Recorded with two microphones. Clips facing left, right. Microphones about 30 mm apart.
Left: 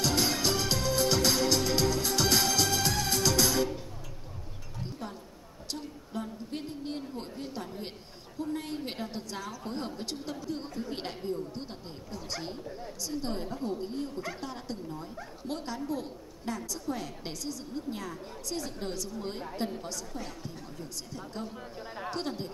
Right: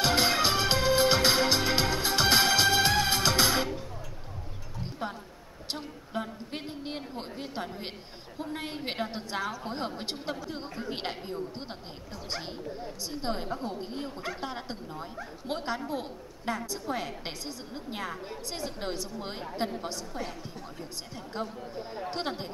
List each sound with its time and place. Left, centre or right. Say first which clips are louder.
0.0 s music: right 3 dB; right
4.8 s a sound: right 5 dB; right
7.4 s a woman's voice: right 2 dB; right